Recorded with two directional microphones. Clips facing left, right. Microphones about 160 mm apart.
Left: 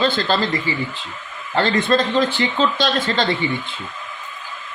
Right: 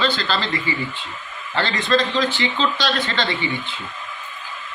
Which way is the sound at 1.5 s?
40° left (ahead or behind).